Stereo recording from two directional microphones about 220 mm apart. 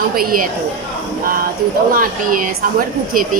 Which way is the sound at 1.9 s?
40° right (ahead or behind).